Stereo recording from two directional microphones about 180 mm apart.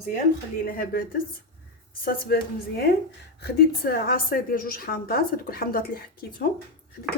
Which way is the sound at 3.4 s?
65° left (ahead or behind).